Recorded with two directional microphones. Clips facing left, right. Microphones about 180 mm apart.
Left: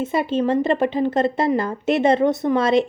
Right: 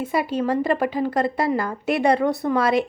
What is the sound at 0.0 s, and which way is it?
A woman's voice, 25° left (ahead or behind).